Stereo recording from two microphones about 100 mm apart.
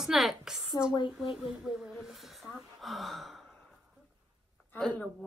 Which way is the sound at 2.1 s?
Centre (ahead or behind).